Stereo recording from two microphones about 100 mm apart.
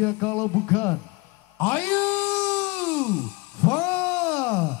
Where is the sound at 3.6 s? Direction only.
25° left (ahead or behind).